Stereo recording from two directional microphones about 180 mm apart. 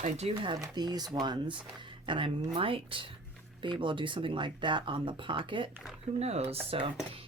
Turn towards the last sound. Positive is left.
turn(degrees=-30)  # may be behind; listen again after turning